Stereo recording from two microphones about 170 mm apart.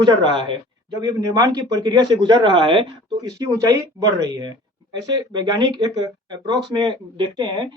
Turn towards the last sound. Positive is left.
turn(degrees=-25)  # may be behind; listen again after turning